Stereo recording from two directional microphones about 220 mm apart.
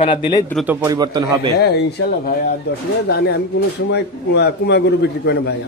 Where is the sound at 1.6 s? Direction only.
50° left (ahead or behind).